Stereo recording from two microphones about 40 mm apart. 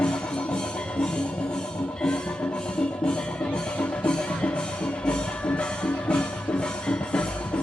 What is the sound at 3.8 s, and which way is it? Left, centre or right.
Music, left.